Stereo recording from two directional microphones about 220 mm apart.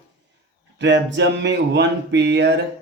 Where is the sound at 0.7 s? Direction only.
55° right (ahead or behind).